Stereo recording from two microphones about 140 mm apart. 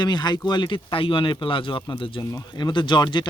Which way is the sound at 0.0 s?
30° left (ahead or behind).